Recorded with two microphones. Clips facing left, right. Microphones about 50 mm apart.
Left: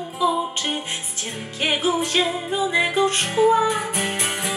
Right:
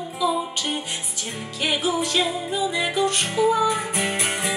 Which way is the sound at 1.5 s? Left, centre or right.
Left.